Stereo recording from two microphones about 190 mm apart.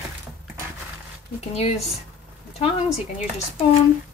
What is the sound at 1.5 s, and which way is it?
Speech, 35° left (ahead or behind).